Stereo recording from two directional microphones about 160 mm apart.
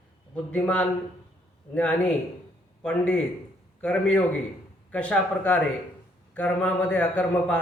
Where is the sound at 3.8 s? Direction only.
5° left (ahead or behind).